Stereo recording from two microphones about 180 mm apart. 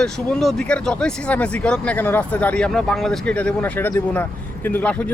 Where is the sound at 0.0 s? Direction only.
5° left (ahead or behind).